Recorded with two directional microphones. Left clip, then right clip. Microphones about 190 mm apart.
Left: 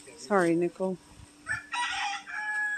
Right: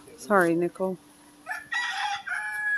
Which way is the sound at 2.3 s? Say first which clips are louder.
Right 5 dB; 45° right (ahead or behind).